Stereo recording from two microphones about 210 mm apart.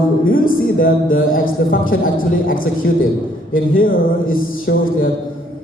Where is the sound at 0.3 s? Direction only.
40° left (ahead or behind).